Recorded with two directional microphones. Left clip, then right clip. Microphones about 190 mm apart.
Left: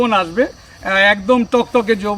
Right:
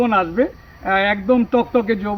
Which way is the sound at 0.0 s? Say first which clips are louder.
Left 2 dB; 25° left (ahead or behind).